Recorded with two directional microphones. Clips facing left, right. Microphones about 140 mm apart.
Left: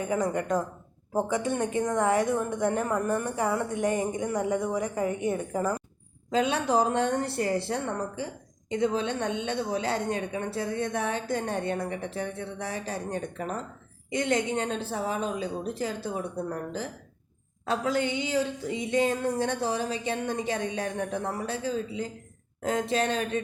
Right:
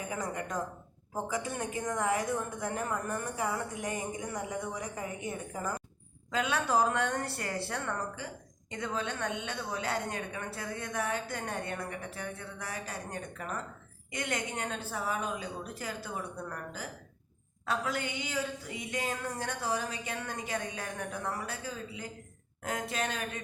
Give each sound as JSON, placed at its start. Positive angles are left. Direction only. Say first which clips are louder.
{"t": 0.1, "sound": "a woman's voice", "louder": "left 11 dB", "side_deg": 25}